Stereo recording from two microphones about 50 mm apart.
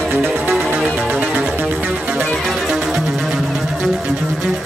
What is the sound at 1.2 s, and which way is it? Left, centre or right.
Music, right.